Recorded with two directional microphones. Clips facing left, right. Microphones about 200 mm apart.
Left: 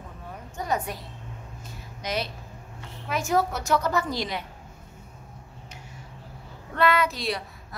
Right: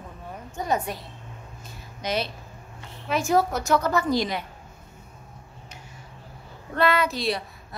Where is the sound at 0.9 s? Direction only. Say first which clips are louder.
Right 2 dB; 25° right (ahead or behind); by 4.4 s 50° right (ahead or behind).